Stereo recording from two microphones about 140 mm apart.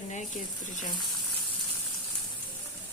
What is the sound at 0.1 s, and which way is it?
Speech, 65° left (ahead or behind).